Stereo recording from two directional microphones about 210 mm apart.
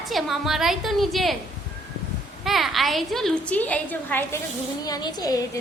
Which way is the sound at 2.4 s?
Centre (ahead or behind).